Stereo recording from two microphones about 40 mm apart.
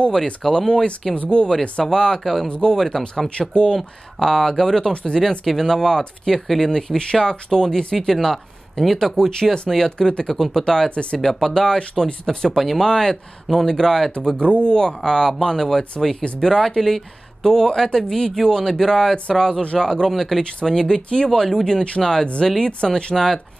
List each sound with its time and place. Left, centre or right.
0.1 s speech: centre
1.1 s speech: left
1.6 s speech: left
3.7 s speech: centre
5.4 s speech: centre
14.4 s speech: left
15.0 s speech: centre
21.3 s speech: centre